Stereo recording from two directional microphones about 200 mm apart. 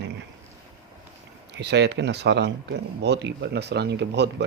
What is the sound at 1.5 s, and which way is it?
A man's voice, 60° right (ahead or behind).